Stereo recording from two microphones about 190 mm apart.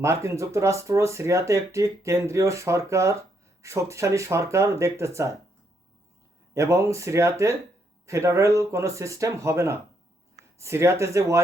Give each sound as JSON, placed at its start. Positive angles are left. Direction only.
{"t": 0.0, "sound": "speech", "side_deg": -15}
{"t": 6.5, "sound": "speech", "side_deg": -15}